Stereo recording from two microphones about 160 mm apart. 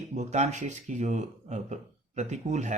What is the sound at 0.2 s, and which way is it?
Speech, 45° right (ahead or behind).